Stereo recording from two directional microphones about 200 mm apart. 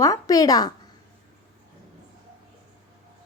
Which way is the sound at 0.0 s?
15° left (ahead or behind).